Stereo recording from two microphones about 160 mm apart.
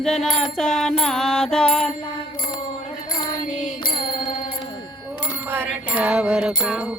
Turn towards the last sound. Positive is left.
turn(degrees=-5)  # may be behind; listen again after turning